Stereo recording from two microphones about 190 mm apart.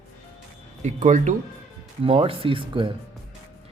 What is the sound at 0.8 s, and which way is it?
Speech, 40° right (ahead or behind).